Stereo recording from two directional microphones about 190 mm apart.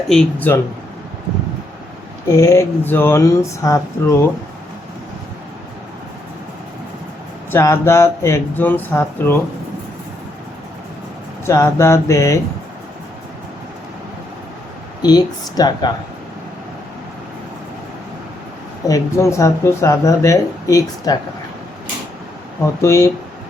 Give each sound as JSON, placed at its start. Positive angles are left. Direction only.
{"t": 0.1, "sound": "speech", "side_deg": 5}
{"t": 2.2, "sound": "speech", "side_deg": 15}
{"t": 7.5, "sound": "speech", "side_deg": 15}
{"t": 11.4, "sound": "speech", "side_deg": 15}
{"t": 15.0, "sound": "speech", "side_deg": 20}
{"t": 18.9, "sound": "speech", "side_deg": 15}
{"t": 22.8, "sound": "speech", "side_deg": 15}